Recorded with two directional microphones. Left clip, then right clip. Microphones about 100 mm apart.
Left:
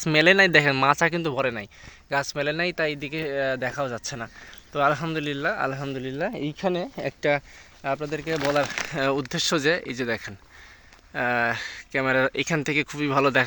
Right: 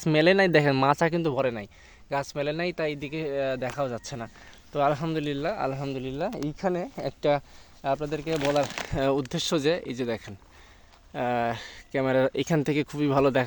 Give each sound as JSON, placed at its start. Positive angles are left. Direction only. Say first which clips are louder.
{"t": 0.0, "sound": "speech", "louder": "left 3 dB", "side_deg": -35}
{"t": 2.0, "sound": "speech", "louder": "left 3 dB", "side_deg": 0}
{"t": 3.8, "sound": "speech", "louder": "left 2 dB", "side_deg": -15}
{"t": 6.1, "sound": "speech", "louder": "left 4 dB", "side_deg": 15}
{"t": 7.2, "sound": "speech", "louder": "left 1 dB", "side_deg": -5}
{"t": 8.7, "sound": "speech", "louder": "left 1 dB", "side_deg": -35}
{"t": 9.3, "sound": "speech", "louder": "left 3 dB", "side_deg": -15}
{"t": 11.1, "sound": "speech", "louder": "left 3 dB", "side_deg": -30}